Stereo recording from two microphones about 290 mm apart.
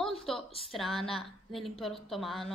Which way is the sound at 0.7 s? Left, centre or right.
Centre.